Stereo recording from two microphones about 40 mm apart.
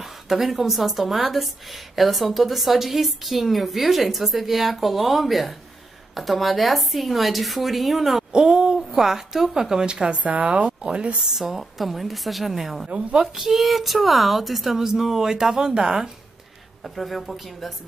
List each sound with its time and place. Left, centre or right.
0.0 s a woman's voice: centre
8.3 s a sound: right
8.7 s speech: centre
10.0 s a woman's voice: right
11.3 s a woman's voice: centre
16.8 s a woman's voice: centre